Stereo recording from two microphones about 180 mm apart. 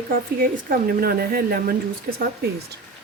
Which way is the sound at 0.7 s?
55° right (ahead or behind).